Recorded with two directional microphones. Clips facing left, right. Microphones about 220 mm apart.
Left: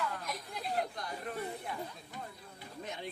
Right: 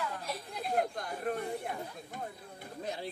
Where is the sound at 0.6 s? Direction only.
50° right (ahead or behind).